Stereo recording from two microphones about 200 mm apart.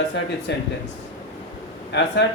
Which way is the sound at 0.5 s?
55° left (ahead or behind).